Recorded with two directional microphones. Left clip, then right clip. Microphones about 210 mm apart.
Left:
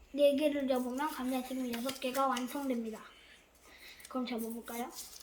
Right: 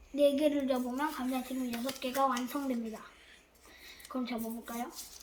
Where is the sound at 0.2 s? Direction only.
Centre (ahead or behind).